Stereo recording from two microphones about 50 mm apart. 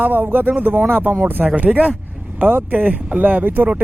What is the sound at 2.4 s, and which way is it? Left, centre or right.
Speech, right.